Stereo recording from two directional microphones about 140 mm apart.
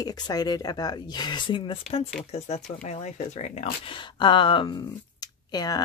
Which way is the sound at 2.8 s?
55° left (ahead or behind).